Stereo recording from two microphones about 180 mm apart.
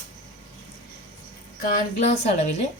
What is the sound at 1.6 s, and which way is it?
Speech, 50° left (ahead or behind).